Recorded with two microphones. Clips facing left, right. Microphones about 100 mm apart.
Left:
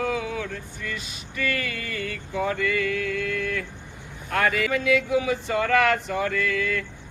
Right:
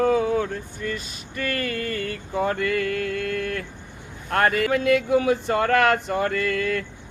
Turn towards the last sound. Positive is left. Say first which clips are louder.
# right 2 dB
turn(degrees=-50)  # may be behind; listen again after turning